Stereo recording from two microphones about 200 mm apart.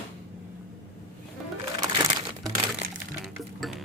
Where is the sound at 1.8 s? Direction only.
20° right (ahead or behind).